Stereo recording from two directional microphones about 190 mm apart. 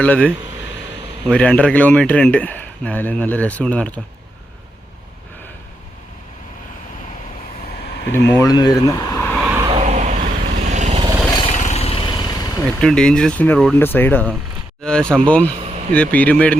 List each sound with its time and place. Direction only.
0.0 s speech: 5° left (ahead or behind)
8.3 s speech: 15° left (ahead or behind)
9.6 s vehicle: 35° right (ahead or behind)
11.5 s vehicle: 40° left (ahead or behind); by 12.6 s 20° left (ahead or behind)
12.6 s speech: 5° left (ahead or behind)